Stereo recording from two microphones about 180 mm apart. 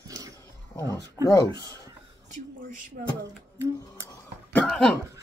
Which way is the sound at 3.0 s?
50° right (ahead or behind).